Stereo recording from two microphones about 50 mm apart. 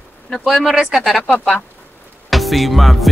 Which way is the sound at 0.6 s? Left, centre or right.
Centre.